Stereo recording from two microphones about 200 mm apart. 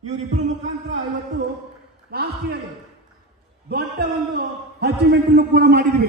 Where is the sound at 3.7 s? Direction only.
50° right (ahead or behind).